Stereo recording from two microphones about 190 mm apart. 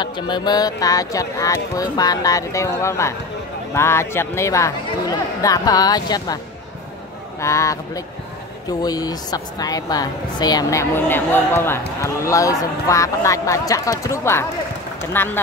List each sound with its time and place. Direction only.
0.0 s a woman's voice: 20° left (ahead or behind)